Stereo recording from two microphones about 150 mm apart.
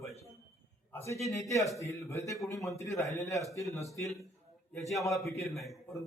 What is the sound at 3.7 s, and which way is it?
Speech, 20° left (ahead or behind).